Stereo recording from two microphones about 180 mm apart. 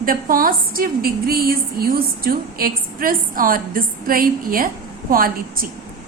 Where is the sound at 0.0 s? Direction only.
50° right (ahead or behind).